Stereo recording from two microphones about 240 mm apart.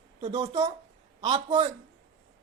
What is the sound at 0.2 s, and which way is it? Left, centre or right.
Speech, right.